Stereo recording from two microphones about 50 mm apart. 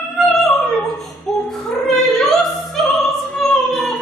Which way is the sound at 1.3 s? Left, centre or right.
Centre.